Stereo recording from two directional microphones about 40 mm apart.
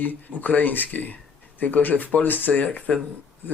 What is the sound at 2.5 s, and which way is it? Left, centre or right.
Speech, left.